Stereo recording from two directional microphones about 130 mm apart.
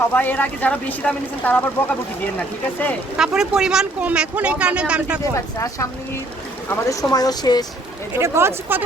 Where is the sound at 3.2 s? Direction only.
5° right (ahead or behind).